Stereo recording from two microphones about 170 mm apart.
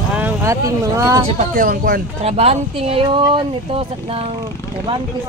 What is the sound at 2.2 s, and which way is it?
Speech, 40° right (ahead or behind).